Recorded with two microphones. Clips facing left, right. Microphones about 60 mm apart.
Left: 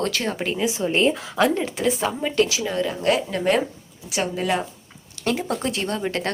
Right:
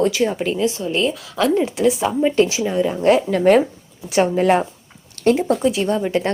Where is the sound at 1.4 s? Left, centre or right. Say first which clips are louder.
Right 5 dB; centre.